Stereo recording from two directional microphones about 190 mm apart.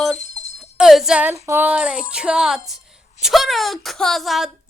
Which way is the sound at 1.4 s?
10° right (ahead or behind).